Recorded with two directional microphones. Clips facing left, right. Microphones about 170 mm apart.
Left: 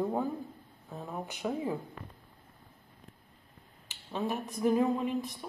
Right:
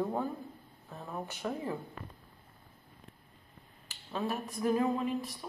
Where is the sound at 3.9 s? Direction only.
15° left (ahead or behind).